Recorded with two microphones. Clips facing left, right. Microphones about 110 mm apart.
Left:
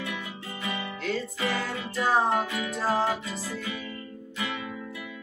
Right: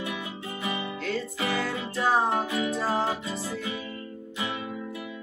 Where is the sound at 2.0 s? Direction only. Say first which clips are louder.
Even; 25° right (ahead or behind).